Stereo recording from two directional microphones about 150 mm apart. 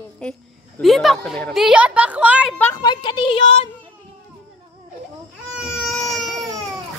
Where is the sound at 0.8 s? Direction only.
Centre (ahead or behind).